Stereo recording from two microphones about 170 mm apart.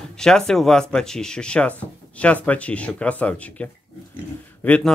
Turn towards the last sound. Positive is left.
turn(degrees=10)  # may be behind; listen again after turning